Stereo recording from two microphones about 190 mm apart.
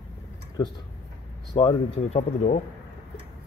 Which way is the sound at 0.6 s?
20° left (ahead or behind).